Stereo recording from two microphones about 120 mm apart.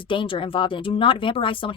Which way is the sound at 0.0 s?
45° left (ahead or behind).